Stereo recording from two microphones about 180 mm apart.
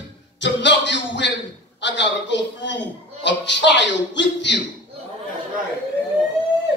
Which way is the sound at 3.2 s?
75° left (ahead or behind).